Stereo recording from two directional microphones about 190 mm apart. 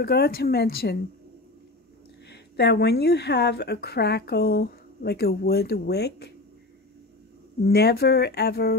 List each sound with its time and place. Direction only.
0.0 s a woman's voice: 55° left (ahead or behind)
2.2 s a woman's voice: 60° left (ahead or behind)
7.6 s a woman's voice: 55° left (ahead or behind)